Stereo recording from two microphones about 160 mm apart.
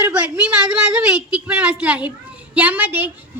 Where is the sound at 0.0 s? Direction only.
5° right (ahead or behind).